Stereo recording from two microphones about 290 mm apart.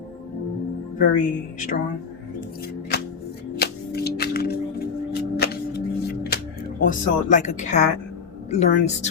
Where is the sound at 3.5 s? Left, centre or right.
Left.